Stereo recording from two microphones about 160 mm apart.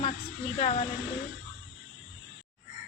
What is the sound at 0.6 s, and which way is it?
Speech, 40° left (ahead or behind).